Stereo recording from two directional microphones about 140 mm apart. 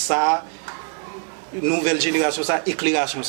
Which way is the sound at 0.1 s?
20° right (ahead or behind).